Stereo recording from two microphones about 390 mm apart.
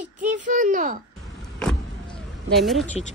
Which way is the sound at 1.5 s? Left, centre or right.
Centre.